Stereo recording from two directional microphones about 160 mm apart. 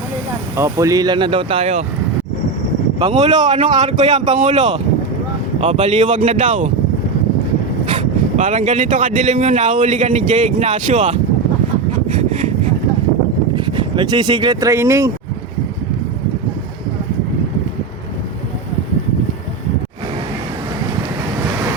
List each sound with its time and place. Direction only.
0.5 s speech: 20° right (ahead or behind); by 1.8 s 40° right (ahead or behind)
3.0 s speech: 35° right (ahead or behind)
3.4 s speech: 45° right (ahead or behind)
8.4 s speech: 50° right (ahead or behind)
13.6 s speech: 30° right (ahead or behind)